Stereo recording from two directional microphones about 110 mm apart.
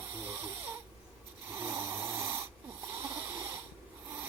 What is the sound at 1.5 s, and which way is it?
Snoring, 20° right (ahead or behind).